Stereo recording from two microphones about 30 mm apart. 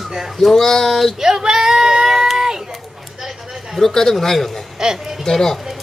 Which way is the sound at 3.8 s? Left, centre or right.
Centre.